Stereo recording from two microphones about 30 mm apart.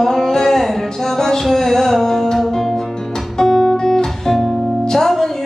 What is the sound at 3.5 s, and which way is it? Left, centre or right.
Guitar, centre.